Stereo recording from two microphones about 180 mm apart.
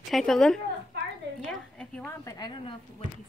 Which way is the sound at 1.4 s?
5° left (ahead or behind).